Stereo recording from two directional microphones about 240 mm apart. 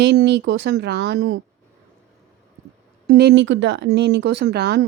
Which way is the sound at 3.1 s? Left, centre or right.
Right.